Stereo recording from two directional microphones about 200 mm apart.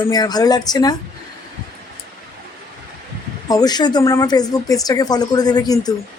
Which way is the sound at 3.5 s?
20° left (ahead or behind).